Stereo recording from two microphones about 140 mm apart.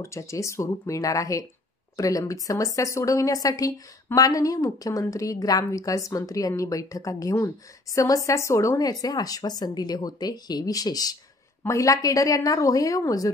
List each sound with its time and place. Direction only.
0.0 s a woman's voice: 20° left (ahead or behind)